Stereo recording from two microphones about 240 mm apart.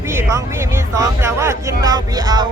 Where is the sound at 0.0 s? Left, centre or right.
Centre.